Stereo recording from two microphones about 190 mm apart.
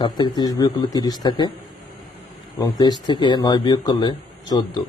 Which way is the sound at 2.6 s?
20° left (ahead or behind).